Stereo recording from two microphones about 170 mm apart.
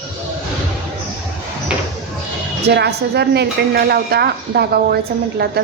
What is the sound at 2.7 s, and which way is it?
A woman's voice, 75° right (ahead or behind).